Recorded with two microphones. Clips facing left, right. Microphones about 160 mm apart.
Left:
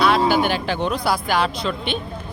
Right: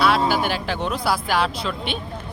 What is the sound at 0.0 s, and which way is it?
Speech, centre (ahead or behind).